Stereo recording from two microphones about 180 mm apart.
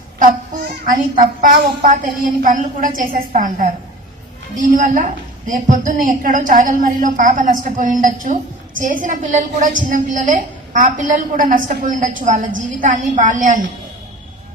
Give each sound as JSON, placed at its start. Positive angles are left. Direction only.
{"t": 1.4, "sound": "a woman's voice", "side_deg": -45}